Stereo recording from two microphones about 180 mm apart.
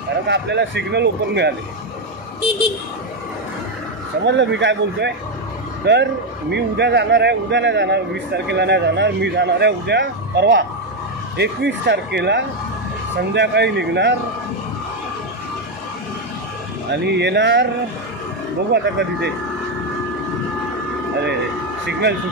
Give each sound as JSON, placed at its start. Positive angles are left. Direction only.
{"t": 0.3, "sound": "speech", "side_deg": -70}
{"t": 4.2, "sound": "a man's voice", "side_deg": -80}
{"t": 16.9, "sound": "speech", "side_deg": -70}
{"t": 18.7, "sound": "speech", "side_deg": -70}